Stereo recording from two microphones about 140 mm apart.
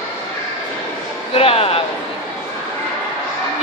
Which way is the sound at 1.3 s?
45° left (ahead or behind).